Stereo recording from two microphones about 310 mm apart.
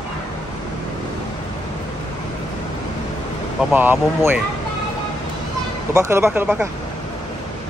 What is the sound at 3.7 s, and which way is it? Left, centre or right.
Speech, centre.